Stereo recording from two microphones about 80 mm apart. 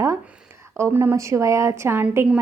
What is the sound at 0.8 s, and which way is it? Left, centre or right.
Speech, right.